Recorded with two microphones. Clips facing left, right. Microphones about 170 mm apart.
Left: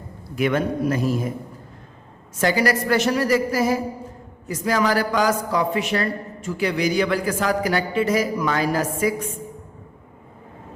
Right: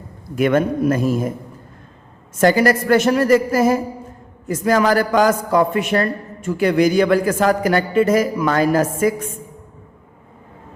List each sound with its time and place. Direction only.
0.3 s a man's voice: 50° right (ahead or behind)
2.4 s a man's voice: 50° right (ahead or behind)